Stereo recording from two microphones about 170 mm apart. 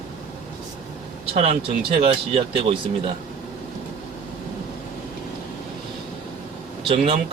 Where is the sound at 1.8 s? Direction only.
30° right (ahead or behind).